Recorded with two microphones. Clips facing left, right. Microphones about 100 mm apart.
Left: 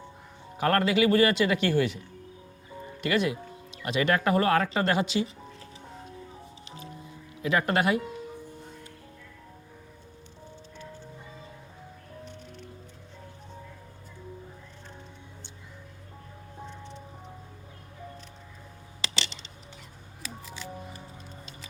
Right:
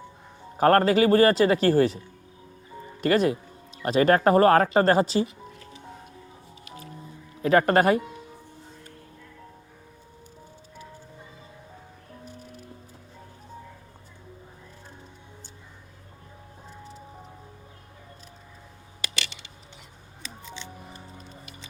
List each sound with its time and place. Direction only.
0.5 s speech: 40° right (ahead or behind)
3.0 s speech: 40° right (ahead or behind)
7.4 s speech: 40° right (ahead or behind)
20.4 s music: 5° left (ahead or behind)